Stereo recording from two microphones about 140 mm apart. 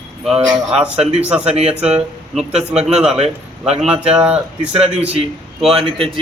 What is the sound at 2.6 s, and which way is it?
A man's voice, 50° right (ahead or behind).